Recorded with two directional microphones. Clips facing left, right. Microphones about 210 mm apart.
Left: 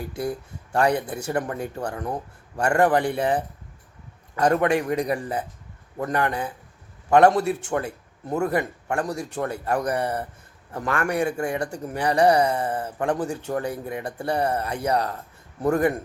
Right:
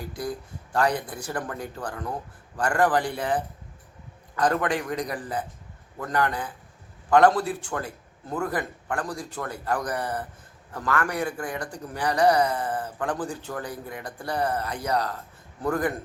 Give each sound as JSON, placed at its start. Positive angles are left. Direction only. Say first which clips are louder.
{"t": 0.3, "sound": "speech", "louder": "left 3 dB", "side_deg": 25}
{"t": 4.4, "sound": "speech", "louder": "left 5 dB", "side_deg": 25}